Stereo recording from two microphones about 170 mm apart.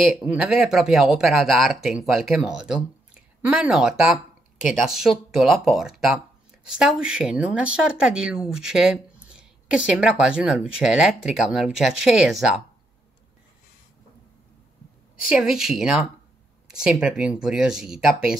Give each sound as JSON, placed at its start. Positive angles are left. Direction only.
{"t": 0.0, "sound": "speech", "side_deg": -5}
{"t": 15.3, "sound": "speech", "side_deg": -5}